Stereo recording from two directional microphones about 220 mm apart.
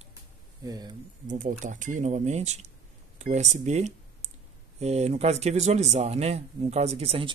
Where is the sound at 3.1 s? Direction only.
30° right (ahead or behind).